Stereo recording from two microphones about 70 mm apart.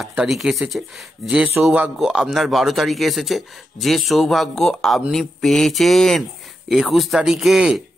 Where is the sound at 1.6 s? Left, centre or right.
Right.